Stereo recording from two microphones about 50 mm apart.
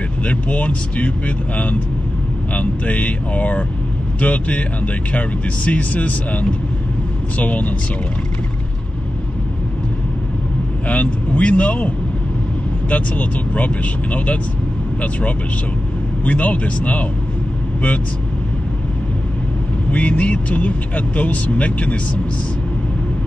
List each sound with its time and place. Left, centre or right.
0.2 s speech: left
10.9 s speech: left
12.9 s speech: left
19.9 s speech: left